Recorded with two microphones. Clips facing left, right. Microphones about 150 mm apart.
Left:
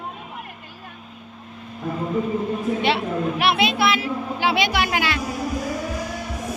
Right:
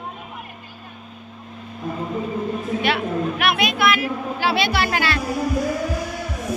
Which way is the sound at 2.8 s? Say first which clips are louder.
Right 2 dB; 30° left (ahead or behind).